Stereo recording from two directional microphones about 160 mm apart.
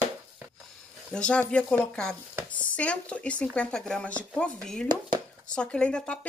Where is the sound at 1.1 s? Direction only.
5° left (ahead or behind).